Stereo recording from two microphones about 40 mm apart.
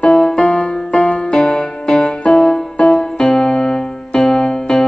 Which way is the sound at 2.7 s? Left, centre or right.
Left.